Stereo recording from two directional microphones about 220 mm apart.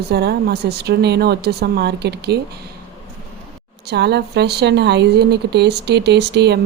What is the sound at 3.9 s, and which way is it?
A woman's voice, 50° right (ahead or behind).